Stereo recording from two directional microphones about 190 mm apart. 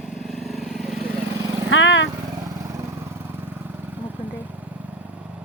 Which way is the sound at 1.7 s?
85° left.